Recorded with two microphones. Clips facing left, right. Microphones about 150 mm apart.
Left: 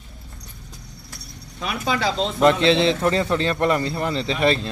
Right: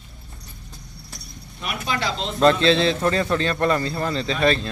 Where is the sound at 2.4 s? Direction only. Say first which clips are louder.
Even; 20° left (ahead or behind).